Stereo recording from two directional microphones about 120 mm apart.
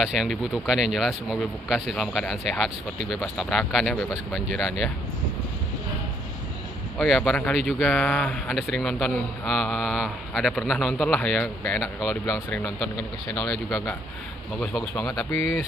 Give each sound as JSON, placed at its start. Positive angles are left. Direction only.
{"t": 0.0, "sound": "speech", "side_deg": 0}
{"t": 7.0, "sound": "speech", "side_deg": 0}
{"t": 15.0, "sound": "speech", "side_deg": 30}